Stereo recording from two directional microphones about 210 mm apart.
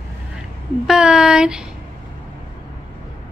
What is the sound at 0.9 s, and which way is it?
Speech, 5° right (ahead or behind).